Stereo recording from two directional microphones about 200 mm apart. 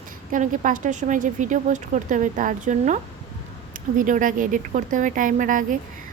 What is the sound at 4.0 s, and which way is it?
A woman's voice, 40° right (ahead or behind).